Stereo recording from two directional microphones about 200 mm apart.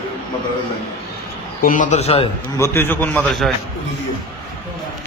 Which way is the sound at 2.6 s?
10° left (ahead or behind).